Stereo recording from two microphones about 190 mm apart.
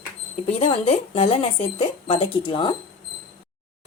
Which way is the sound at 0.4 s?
35° left (ahead or behind).